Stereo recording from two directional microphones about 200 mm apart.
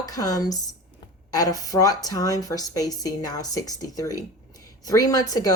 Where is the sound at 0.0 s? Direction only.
15° left (ahead or behind).